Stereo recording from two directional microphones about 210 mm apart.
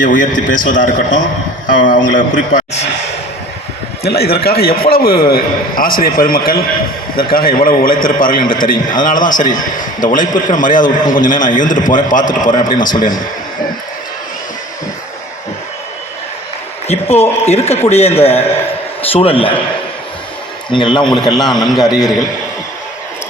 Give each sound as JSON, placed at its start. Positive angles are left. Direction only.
{"t": 0.0, "sound": "a man's voice", "side_deg": 40}
{"t": 4.0, "sound": "a man's voice", "side_deg": 50}
{"t": 16.9, "sound": "a man's voice", "side_deg": 30}
{"t": 20.7, "sound": "a man's voice", "side_deg": 20}